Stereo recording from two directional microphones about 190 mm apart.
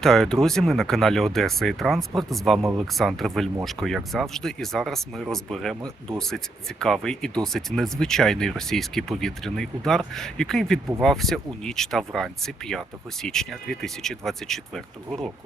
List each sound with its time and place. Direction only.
0.0 s speech: centre (ahead or behind)